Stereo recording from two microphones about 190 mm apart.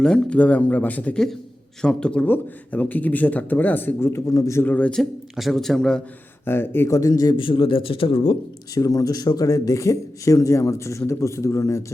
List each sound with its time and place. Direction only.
0.0 s speech: 5° left (ahead or behind); by 8.4 s 30° left (ahead or behind)
8.7 s speech: 20° left (ahead or behind)